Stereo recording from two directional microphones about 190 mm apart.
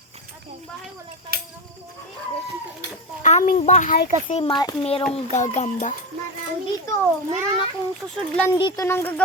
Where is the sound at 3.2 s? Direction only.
40° left (ahead or behind).